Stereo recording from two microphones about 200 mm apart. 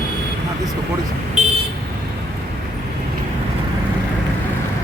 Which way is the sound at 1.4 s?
35° right (ahead or behind).